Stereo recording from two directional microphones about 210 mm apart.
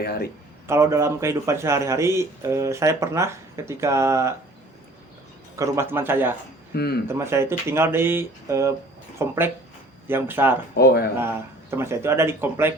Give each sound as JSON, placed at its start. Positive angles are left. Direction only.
{"t": 0.0, "sound": "speech", "side_deg": 50}
{"t": 0.7, "sound": "speech", "side_deg": -15}
{"t": 5.5, "sound": "speech", "side_deg": -10}
{"t": 6.7, "sound": "speech", "side_deg": 50}
{"t": 7.1, "sound": "speech", "side_deg": -10}
{"t": 10.8, "sound": "speech", "side_deg": 50}
{"t": 11.7, "sound": "speech", "side_deg": -10}